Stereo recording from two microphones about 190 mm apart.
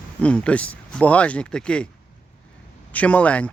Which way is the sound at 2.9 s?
5° left (ahead or behind).